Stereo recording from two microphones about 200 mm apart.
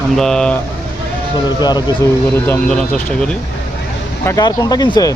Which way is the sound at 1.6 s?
20° left (ahead or behind).